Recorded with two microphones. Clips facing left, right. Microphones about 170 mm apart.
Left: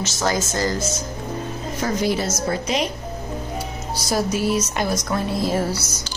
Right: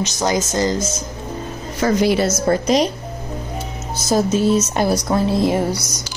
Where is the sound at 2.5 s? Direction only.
40° right (ahead or behind).